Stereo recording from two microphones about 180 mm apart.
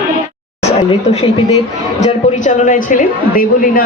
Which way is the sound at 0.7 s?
35° left (ahead or behind).